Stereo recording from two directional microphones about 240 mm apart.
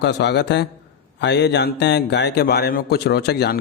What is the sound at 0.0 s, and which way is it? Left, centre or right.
Speech, left.